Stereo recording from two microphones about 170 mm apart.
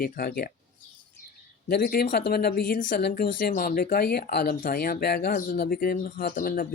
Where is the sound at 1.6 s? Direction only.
65° left (ahead or behind).